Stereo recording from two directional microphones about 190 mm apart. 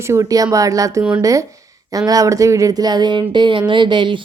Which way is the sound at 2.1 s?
15° right (ahead or behind).